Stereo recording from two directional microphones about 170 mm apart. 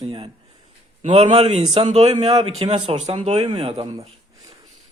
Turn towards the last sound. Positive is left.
turn(degrees=-30)  # may be behind; listen again after turning